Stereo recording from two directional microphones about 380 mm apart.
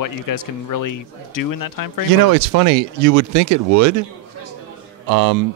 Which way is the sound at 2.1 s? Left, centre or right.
Right.